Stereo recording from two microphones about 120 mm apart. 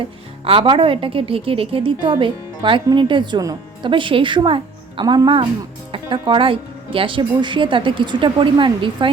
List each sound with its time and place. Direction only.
0.0 s speech: 50° right (ahead or behind)